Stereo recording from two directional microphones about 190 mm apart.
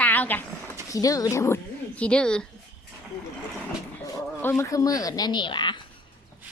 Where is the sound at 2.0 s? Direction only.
5° left (ahead or behind).